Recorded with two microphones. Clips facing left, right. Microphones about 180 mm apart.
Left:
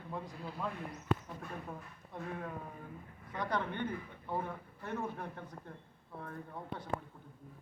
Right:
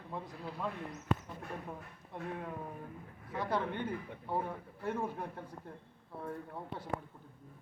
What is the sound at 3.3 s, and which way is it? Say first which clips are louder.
A man's voice: right 1 dB; 5° right (ahead or behind).